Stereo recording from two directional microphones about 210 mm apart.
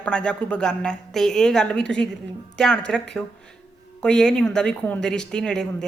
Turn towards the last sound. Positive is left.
turn(degrees=5)  # may be behind; listen again after turning